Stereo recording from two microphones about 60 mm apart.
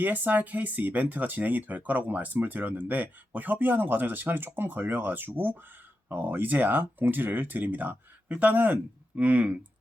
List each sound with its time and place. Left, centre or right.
0.0 s speech: right